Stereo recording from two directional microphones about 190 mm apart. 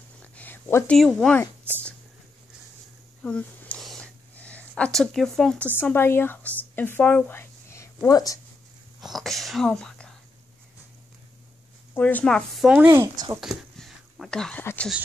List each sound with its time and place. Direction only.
0.2 s a sound: 10° left (ahead or behind)
0.9 s a woman's voice: centre (ahead or behind)
3.2 s a sound: 5° left (ahead or behind)
5.8 s speech: 10° left (ahead or behind)
9.0 s speech: centre (ahead or behind)
11.9 s a woman's voice: 10° left (ahead or behind); by 13.1 s 10° right (ahead or behind)
13.4 s speech: centre (ahead or behind)